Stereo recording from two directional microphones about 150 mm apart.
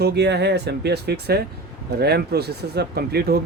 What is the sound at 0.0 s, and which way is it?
Speech, 90° right.